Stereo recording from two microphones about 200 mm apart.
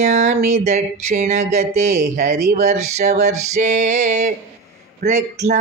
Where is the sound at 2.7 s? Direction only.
35° right (ahead or behind).